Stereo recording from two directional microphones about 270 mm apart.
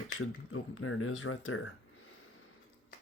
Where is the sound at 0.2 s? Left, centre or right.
Left.